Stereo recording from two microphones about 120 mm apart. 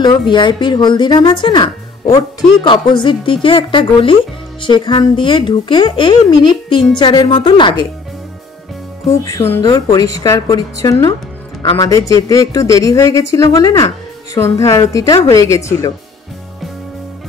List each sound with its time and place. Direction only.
0.3 s speech: 40° left (ahead or behind)
9.2 s speech: 20° left (ahead or behind)
9.6 s speech: 35° left (ahead or behind)